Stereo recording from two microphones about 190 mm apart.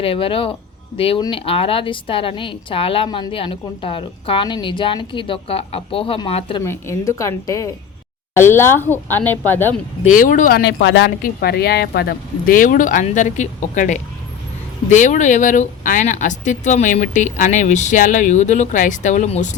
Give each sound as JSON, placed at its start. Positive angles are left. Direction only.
{"t": 0.0, "sound": "a woman's voice", "side_deg": 30}
{"t": 6.6, "sound": "speech", "side_deg": 15}
{"t": 10.0, "sound": "speech", "side_deg": 40}
{"t": 10.6, "sound": "speech", "side_deg": 70}
{"t": 11.2, "sound": "speech", "side_deg": 55}